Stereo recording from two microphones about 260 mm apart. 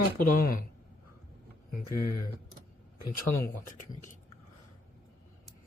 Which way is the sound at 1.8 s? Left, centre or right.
Left.